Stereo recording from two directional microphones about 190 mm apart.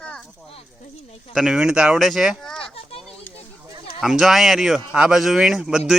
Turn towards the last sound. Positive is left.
turn(degrees=0)  # may be behind; listen again after turning